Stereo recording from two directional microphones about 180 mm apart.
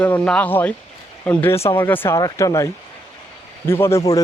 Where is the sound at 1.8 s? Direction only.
10° left (ahead or behind).